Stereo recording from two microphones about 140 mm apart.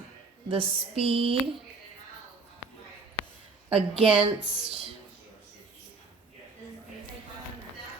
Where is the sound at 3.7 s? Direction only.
45° right (ahead or behind).